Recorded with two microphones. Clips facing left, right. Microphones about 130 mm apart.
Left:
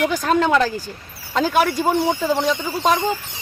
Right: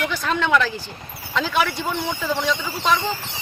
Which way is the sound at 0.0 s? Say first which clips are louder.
Left 5 dB; 45° left (ahead or behind).